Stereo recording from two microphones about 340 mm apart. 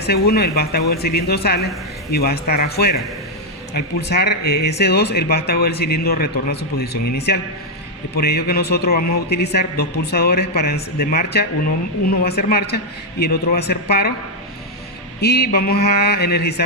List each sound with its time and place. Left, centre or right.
0.0 s speech: left
15.2 s speech: left